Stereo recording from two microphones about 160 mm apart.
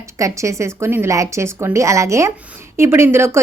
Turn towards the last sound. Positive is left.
turn(degrees=-15)  # may be behind; listen again after turning